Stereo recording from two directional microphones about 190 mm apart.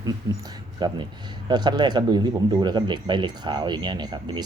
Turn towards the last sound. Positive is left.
turn(degrees=-20)  # may be behind; listen again after turning